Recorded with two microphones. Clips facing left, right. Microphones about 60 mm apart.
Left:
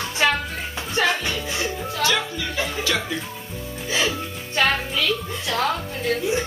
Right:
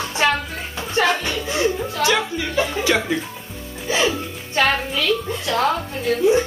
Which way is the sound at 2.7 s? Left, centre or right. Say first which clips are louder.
Right 5 dB; centre.